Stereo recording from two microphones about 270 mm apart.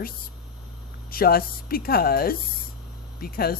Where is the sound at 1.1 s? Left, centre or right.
Left.